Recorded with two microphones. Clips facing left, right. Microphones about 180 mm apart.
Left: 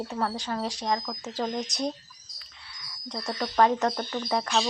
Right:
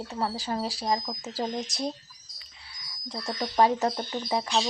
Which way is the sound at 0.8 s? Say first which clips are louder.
Even; 10° right (ahead or behind).